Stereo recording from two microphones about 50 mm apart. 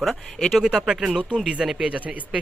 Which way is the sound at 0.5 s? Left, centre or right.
Centre.